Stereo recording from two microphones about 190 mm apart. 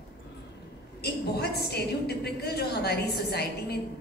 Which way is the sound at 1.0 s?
55° left (ahead or behind).